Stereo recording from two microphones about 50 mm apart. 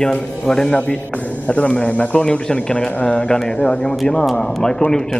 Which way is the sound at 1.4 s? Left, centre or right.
Left.